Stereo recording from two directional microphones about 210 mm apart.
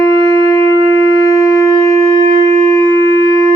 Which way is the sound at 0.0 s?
15° left (ahead or behind).